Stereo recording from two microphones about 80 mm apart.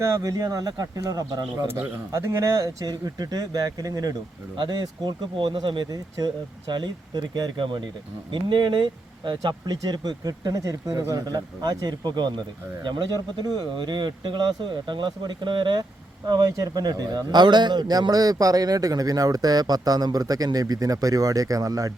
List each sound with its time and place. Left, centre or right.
0.0 s a man's voice: right
2.1 s a man's voice: right
4.7 s speech: right
16.3 s a man's voice: right